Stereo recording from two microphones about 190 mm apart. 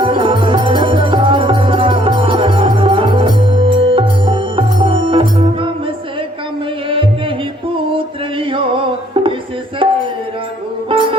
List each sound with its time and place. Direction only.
0.0 s music: 25° right (ahead or behind)
6.9 s music: 25° right (ahead or behind)
10.8 s music: 25° right (ahead or behind)